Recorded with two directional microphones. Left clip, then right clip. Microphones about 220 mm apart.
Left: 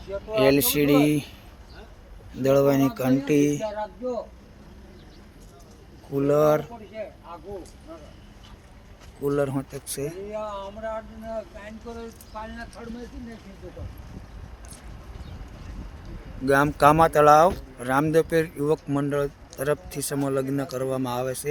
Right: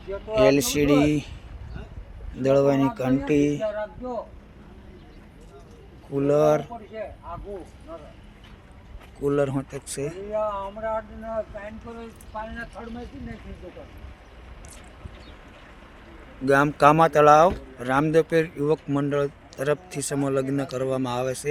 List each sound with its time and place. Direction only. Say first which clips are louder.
0.3 s speech: right 1 dB; centre (ahead or behind)
2.4 s speech: even; 5° left (ahead or behind)
6.1 s speech: even; centre (ahead or behind)
9.2 s speech: right 1 dB; 5° right (ahead or behind)
10.3 s speech: right 5 dB; 35° right (ahead or behind)
12.8 s speech: right 2 dB; 30° right (ahead or behind)
16.5 s speech: right 1 dB; centre (ahead or behind)